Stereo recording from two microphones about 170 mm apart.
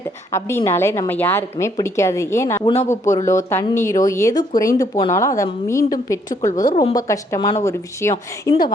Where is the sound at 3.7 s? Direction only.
15° left (ahead or behind).